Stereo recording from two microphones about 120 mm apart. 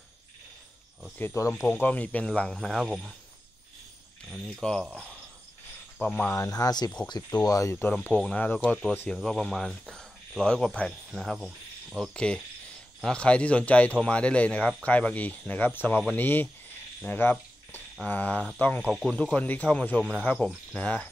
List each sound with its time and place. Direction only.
1.1 s speech: 20° left (ahead or behind); by 3.2 s 5° right (ahead or behind)
4.3 s speech: 5° left (ahead or behind)
6.3 s speech: 30° left (ahead or behind)
7.7 s speech: 15° left (ahead or behind)
11.1 s cricket: centre (ahead or behind)
12.0 s speech: 5° left (ahead or behind)
17.0 s cricket: 15° left (ahead or behind)
18.0 s speech: 15° left (ahead or behind)
18.9 s speech: centre (ahead or behind)
19.3 s speech: 15° left (ahead or behind)